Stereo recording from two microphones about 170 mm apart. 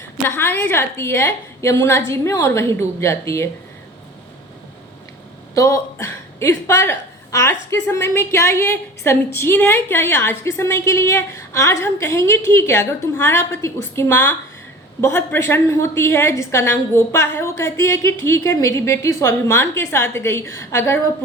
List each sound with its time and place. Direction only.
0.3 s a woman's voice: 15° left (ahead or behind)
5.5 s a woman's voice: 20° left (ahead or behind)